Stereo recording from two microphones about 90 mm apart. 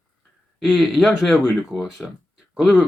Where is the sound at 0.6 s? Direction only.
Centre (ahead or behind).